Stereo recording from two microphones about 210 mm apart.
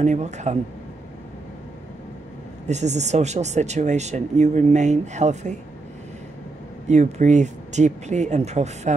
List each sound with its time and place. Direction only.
0.0 s speech: 35° right (ahead or behind)
2.7 s speech: 35° right (ahead or behind)
6.9 s speech: 35° right (ahead or behind)